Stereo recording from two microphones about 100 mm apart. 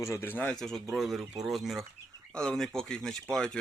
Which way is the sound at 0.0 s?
25° left (ahead or behind).